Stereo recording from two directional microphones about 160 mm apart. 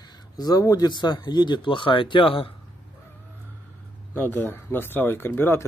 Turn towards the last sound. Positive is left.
turn(degrees=15)  # may be behind; listen again after turning